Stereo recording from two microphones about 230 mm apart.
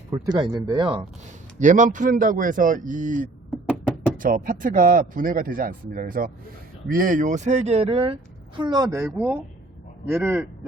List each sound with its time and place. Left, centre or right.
0.1 s speech: centre
1.5 s a man's voice: right; by 10.7 s centre